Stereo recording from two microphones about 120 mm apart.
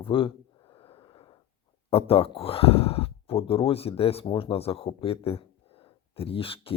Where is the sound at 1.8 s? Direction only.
55° left (ahead or behind).